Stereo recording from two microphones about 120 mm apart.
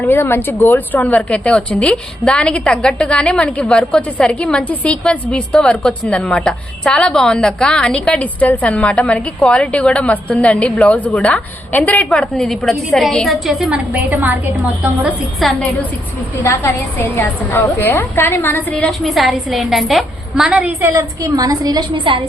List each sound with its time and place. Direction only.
0.1 s a woman's voice: 20° left (ahead or behind); by 14.3 s 15° right (ahead or behind)
15.4 s a woman's voice: centre (ahead or behind)
16.6 s a woman's voice: 20° left (ahead or behind)
19.0 s a woman's voice: centre (ahead or behind)
20.9 s a woman's voice: 30° right (ahead or behind)
21.9 s a woman's voice: 45° right (ahead or behind)